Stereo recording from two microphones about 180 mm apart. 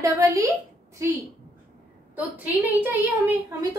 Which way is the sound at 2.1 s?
10° right (ahead or behind).